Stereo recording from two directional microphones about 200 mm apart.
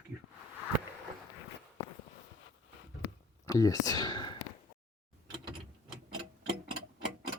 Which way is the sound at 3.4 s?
15° left (ahead or behind).